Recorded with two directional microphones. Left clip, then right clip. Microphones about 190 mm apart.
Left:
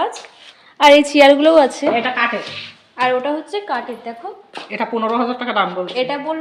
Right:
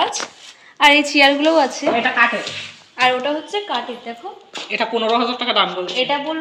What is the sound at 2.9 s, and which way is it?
A woman's voice, 50° left (ahead or behind).